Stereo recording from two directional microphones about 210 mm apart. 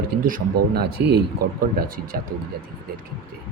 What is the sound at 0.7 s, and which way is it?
Speech, 50° right (ahead or behind).